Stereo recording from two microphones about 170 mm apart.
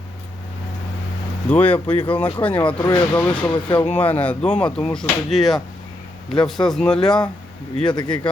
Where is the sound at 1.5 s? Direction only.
10° left (ahead or behind).